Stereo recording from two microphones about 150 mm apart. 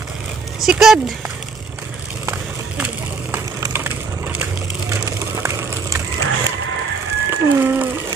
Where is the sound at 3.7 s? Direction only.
15° right (ahead or behind).